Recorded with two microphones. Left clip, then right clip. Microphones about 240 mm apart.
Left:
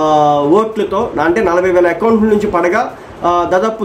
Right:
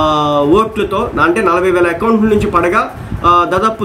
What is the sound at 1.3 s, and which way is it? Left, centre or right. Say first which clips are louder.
Speech: even; centre.